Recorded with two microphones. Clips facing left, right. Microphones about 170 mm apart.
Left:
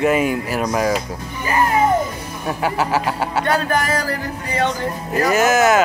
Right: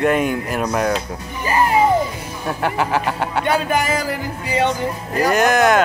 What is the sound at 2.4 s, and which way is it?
Speech, 5° left (ahead or behind).